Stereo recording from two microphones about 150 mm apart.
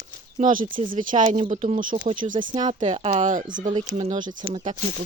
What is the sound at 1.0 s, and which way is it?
Speech, 60° right (ahead or behind).